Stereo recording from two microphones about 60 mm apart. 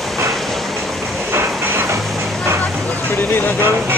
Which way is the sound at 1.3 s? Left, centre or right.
Right.